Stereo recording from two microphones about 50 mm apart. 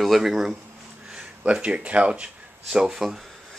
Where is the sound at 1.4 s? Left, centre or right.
Right.